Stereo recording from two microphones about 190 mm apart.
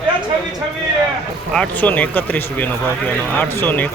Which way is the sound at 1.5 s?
10° left (ahead or behind).